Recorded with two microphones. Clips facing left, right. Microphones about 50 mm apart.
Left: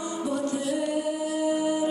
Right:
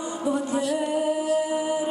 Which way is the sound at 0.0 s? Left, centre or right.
Centre.